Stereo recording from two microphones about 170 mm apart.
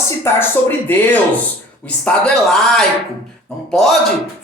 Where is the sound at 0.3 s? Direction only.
15° left (ahead or behind).